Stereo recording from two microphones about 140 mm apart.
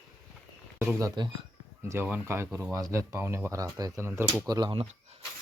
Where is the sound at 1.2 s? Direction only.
30° right (ahead or behind).